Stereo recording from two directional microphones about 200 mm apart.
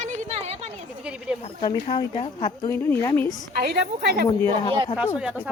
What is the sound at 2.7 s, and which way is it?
Speech, 10° left (ahead or behind).